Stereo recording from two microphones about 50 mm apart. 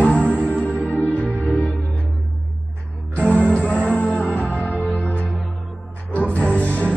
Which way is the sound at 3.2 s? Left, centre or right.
Left.